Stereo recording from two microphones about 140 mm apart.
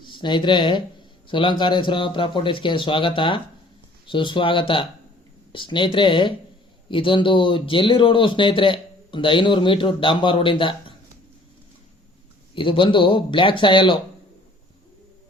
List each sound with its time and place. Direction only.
0.0 s speech: 35° left (ahead or behind)
12.5 s speech: 35° left (ahead or behind)